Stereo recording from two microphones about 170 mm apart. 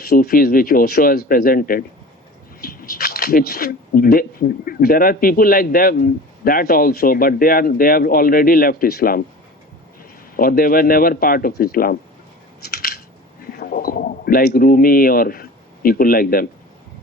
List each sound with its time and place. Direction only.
0.0 s speech: 65° left (ahead or behind)
10.3 s speech: 60° left (ahead or behind)
12.6 s scissors: 65° left (ahead or behind)
13.5 s speech: 60° left (ahead or behind)